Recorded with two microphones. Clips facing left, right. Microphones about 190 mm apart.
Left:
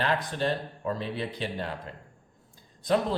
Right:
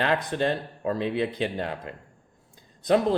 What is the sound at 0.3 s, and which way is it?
Speech, 55° right (ahead or behind).